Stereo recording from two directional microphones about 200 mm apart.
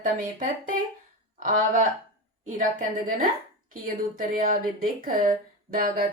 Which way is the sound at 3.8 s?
45° right (ahead or behind).